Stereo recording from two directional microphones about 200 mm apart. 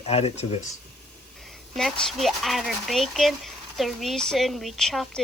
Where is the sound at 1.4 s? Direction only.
Centre (ahead or behind).